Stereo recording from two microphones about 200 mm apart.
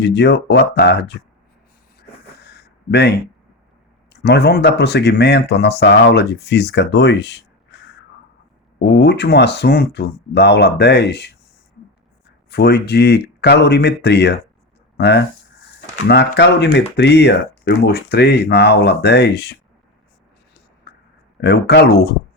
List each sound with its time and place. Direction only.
0.0 s speech: 60° left (ahead or behind)
2.0 s a sound: 55° left (ahead or behind)
4.1 s speech: 55° left (ahead or behind)
8.8 s speech: 60° left (ahead or behind)
12.5 s speech: 55° left (ahead or behind)
20.9 s a sound: 55° left (ahead or behind)
21.4 s speech: 55° left (ahead or behind)